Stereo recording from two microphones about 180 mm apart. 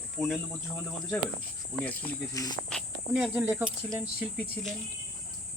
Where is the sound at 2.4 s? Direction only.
20° left (ahead or behind).